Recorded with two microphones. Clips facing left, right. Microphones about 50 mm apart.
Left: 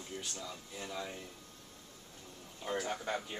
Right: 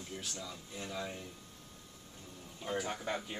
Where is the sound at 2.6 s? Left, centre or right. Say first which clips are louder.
Even; centre.